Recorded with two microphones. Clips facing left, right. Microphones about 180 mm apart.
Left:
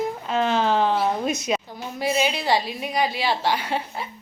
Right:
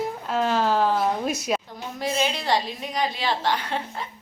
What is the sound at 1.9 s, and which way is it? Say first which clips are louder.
A woman's voice: left 2 dB; 5° left (ahead or behind).